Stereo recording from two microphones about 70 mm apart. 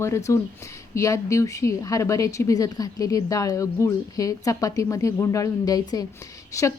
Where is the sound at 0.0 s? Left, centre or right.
Left.